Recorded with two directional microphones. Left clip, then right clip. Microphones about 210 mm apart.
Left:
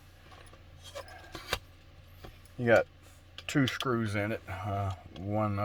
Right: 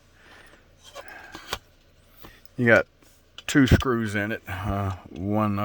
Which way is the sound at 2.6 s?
50° right (ahead or behind).